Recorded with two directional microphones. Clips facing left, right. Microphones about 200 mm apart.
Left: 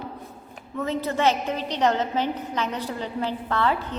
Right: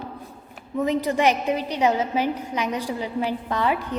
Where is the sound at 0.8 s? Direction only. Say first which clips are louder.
Right 3 dB; 15° right (ahead or behind).